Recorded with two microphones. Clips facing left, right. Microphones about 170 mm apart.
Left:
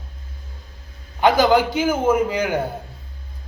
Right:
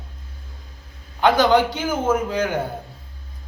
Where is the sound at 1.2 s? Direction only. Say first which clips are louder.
Left 1 dB; 10° left (ahead or behind).